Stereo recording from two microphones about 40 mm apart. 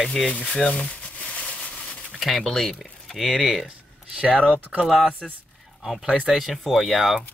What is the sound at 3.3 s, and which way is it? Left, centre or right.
Speech, centre.